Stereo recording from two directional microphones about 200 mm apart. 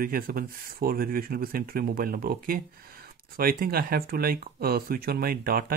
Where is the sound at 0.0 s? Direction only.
45° right (ahead or behind).